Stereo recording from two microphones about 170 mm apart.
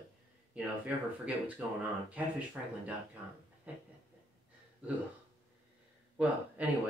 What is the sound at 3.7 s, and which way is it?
Speech, 10° right (ahead or behind).